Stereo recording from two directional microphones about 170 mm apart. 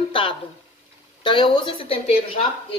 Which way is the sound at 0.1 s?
30° left (ahead or behind).